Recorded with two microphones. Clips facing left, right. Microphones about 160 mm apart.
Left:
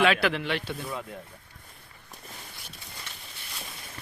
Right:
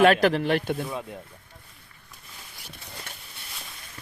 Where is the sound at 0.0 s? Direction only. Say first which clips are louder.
Right 5 dB; 45° right (ahead or behind).